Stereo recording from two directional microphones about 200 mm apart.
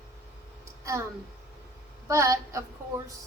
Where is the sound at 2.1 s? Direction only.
15° right (ahead or behind).